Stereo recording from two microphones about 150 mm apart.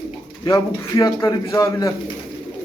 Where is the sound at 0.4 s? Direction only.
25° left (ahead or behind).